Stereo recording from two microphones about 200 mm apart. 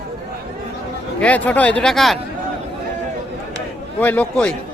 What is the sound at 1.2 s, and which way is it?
Speech, 5° left (ahead or behind).